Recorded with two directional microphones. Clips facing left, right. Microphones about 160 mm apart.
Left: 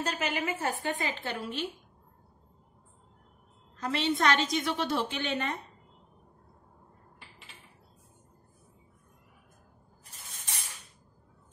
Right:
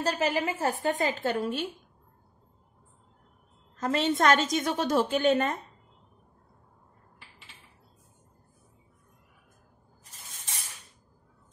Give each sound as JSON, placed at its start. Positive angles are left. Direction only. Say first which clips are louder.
{"t": 0.0, "sound": "a woman's voice", "louder": "right 5 dB", "side_deg": -35}
{"t": 3.7, "sound": "a woman's voice", "louder": "right 3 dB", "side_deg": -45}